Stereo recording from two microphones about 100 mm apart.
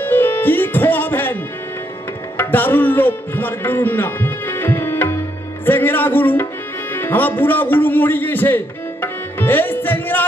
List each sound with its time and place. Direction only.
0.0 s music: 20° left (ahead or behind)
5.7 s speech: 20° left (ahead or behind)
6.9 s music: 20° left (ahead or behind)